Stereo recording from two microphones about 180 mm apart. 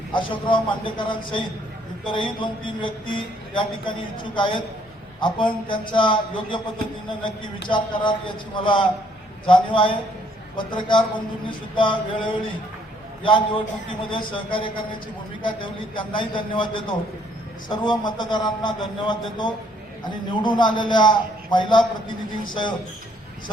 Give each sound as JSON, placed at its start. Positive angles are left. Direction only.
{"t": 0.1, "sound": "a man's voice", "side_deg": 25}